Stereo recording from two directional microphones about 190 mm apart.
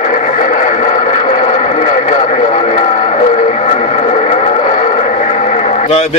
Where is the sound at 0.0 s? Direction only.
40° left (ahead or behind).